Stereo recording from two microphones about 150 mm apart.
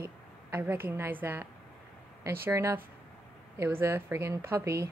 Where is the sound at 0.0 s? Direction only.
15° right (ahead or behind).